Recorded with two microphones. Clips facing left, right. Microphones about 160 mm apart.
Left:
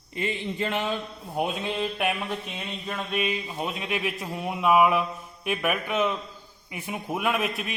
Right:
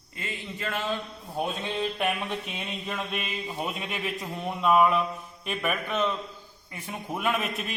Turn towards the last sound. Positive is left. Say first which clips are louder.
# left 2 dB
turn(degrees=0)  # may be behind; listen again after turning